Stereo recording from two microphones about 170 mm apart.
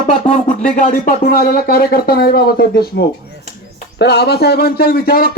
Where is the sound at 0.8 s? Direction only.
55° left (ahead or behind); by 2.8 s 70° left (ahead or behind).